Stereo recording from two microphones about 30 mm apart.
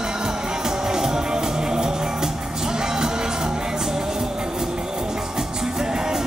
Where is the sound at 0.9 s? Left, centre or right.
Centre.